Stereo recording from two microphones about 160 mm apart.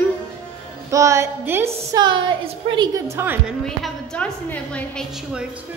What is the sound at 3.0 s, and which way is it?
Speech, 15° right (ahead or behind).